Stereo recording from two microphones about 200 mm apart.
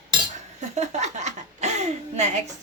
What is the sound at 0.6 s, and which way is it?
A woman's voice, 35° right (ahead or behind).